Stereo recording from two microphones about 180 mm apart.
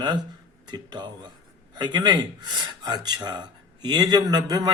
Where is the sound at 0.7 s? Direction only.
25° right (ahead or behind).